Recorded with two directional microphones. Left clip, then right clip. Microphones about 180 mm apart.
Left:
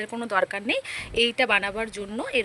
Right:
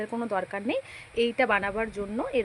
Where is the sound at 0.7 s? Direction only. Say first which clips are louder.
Left 4 dB; 65° left (ahead or behind).